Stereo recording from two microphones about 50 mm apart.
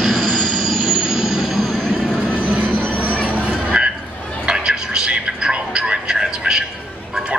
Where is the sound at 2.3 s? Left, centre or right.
Right.